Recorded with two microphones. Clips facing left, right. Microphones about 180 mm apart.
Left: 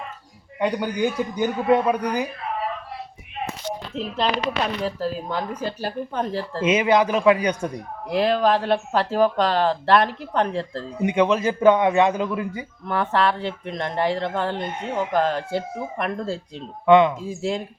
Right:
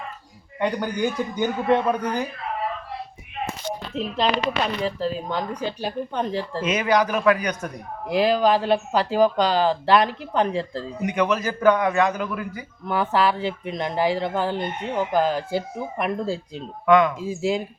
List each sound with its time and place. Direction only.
0.6 s a man's voice: 10° left (ahead or behind)
3.9 s speech: centre (ahead or behind)
6.6 s a man's voice: 25° left (ahead or behind)
8.0 s speech: centre (ahead or behind)
11.0 s a man's voice: 25° left (ahead or behind)
12.8 s speech: centre (ahead or behind)
16.8 s a man's voice: 25° left (ahead or behind)
17.2 s speech: 5° right (ahead or behind)